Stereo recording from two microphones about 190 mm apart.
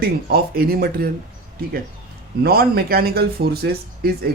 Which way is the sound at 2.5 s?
55° right (ahead or behind).